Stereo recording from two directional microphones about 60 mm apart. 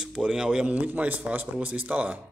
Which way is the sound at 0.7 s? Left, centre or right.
Right.